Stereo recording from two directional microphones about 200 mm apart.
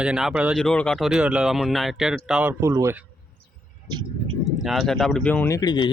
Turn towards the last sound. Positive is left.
turn(degrees=20)  # may be behind; listen again after turning